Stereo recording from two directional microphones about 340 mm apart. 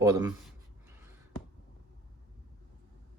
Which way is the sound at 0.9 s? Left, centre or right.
Centre.